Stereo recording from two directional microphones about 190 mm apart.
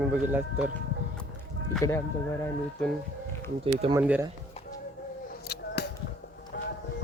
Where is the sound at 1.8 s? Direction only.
15° left (ahead or behind).